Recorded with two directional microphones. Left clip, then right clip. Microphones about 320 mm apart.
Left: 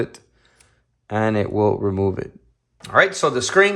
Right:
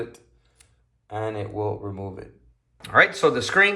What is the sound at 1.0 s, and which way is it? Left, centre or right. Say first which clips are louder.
Speech: left 9 dB; left.